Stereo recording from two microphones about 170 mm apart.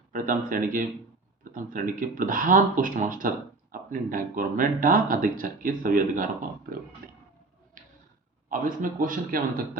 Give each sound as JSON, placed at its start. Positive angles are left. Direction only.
{"t": 0.1, "sound": "speech", "side_deg": -55}
{"t": 7.8, "sound": "a sound", "side_deg": -55}
{"t": 8.4, "sound": "speech", "side_deg": -50}